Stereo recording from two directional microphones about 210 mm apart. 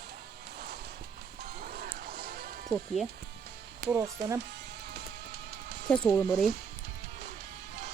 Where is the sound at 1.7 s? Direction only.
45° right (ahead or behind).